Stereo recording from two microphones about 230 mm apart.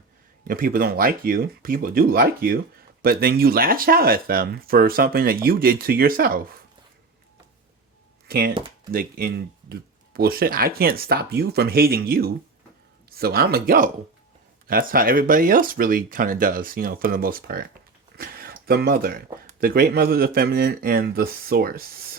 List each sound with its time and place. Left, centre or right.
0.4 s speech: right
8.3 s speech: right
8.5 s speech: right
8.9 s speech: right